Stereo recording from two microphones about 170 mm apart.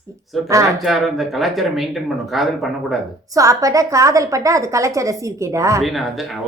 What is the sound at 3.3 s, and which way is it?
A woman's voice, 20° right (ahead or behind).